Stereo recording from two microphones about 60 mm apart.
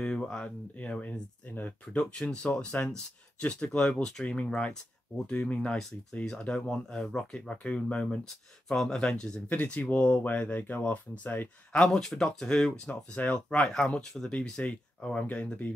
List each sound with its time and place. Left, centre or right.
0.0 s a sound: centre
0.7 s speech: centre
4.3 s speech: left
7.4 s speech: left
11.7 s speech: centre